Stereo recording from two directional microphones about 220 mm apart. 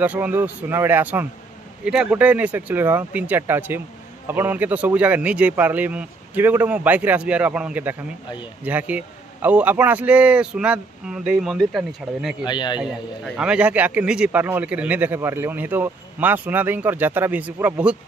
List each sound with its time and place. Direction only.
0.0 s a man's voice: 5° right (ahead or behind)
12.4 s a man's voice: 20° left (ahead or behind)
12.8 s a man's voice: 5° right (ahead or behind)